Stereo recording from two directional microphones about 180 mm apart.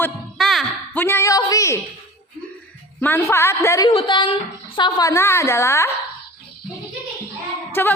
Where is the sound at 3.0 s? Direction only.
10° left (ahead or behind).